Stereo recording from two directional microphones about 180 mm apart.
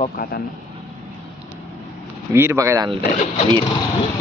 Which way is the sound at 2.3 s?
15° right (ahead or behind).